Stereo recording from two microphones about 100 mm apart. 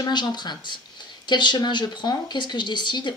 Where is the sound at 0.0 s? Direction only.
45° left (ahead or behind).